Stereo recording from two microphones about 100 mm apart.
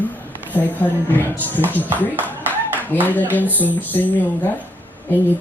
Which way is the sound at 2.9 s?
20° left (ahead or behind).